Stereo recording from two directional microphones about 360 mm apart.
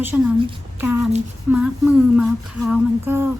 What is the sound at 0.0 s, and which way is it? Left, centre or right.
A woman's voice, centre.